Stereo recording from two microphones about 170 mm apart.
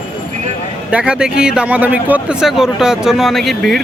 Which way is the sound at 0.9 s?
5° right (ahead or behind).